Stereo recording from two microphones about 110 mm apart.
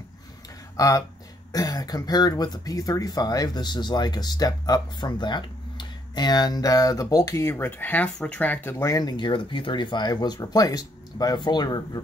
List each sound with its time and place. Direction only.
0.7 s speech: 30° left (ahead or behind)
8.9 s speech: 40° left (ahead or behind)